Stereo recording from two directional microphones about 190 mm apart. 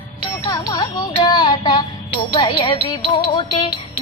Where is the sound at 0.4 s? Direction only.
20° left (ahead or behind).